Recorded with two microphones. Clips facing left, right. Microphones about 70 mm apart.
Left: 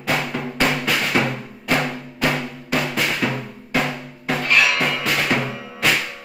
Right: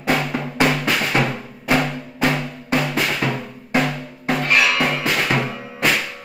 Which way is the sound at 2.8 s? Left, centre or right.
Centre.